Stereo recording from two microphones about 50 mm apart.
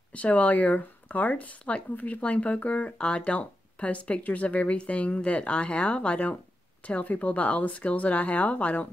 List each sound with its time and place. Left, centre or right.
0.1 s speech: left